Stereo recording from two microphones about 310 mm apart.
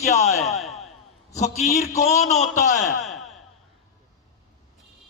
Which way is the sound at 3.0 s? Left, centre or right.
Centre.